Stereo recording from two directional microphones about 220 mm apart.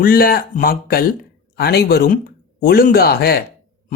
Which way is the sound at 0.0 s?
40° left (ahead or behind).